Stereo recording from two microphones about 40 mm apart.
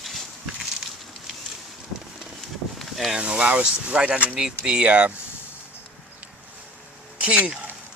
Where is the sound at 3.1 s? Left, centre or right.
Right.